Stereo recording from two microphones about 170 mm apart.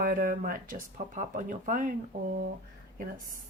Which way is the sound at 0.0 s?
55° right (ahead or behind).